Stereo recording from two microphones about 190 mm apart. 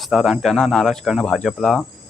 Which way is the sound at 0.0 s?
Centre (ahead or behind).